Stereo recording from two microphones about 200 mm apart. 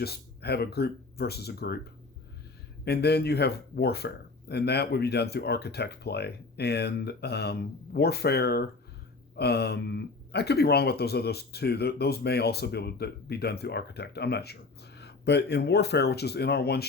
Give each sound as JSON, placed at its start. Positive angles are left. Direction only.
{"t": 0.0, "sound": "speech", "side_deg": 55}
{"t": 2.8, "sound": "speech", "side_deg": 55}